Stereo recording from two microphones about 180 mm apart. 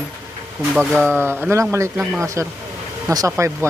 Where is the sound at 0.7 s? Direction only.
Centre (ahead or behind).